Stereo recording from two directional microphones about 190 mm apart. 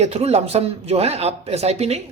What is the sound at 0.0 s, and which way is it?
Speech, 35° right (ahead or behind).